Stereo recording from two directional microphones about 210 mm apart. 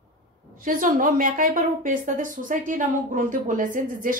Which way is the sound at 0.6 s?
40° right (ahead or behind).